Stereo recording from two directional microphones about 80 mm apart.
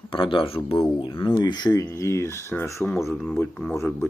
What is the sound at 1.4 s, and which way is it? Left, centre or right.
Speech, left.